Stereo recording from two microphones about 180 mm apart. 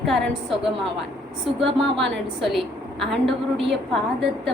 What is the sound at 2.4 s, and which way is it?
Speech, centre (ahead or behind).